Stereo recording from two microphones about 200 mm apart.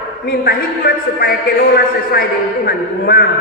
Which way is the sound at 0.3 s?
50° left (ahead or behind).